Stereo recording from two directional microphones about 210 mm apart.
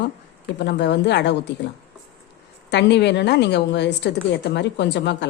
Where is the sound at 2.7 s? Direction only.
55° left (ahead or behind).